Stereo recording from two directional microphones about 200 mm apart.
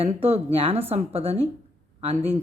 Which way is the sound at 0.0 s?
30° right (ahead or behind).